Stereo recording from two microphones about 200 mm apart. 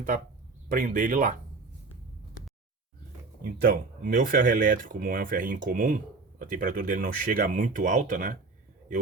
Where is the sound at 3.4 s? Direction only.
45° right (ahead or behind).